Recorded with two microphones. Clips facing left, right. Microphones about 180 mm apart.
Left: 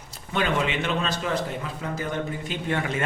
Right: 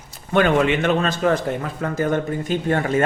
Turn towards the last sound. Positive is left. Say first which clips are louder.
# right 7 dB
turn(degrees=-45)  # may be behind; listen again after turning